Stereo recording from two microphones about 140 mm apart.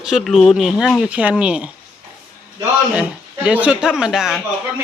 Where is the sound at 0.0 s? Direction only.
Centre (ahead or behind).